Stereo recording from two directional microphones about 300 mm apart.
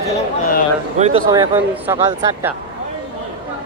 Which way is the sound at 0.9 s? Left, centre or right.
Right.